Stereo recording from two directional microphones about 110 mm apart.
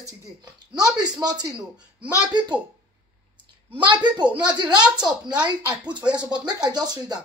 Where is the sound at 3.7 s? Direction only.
45° right (ahead or behind).